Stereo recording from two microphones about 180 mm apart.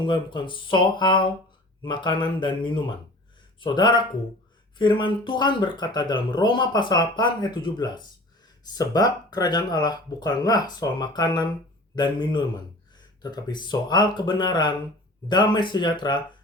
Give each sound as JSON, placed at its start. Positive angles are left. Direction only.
{"t": 0.0, "sound": "speech", "side_deg": 25}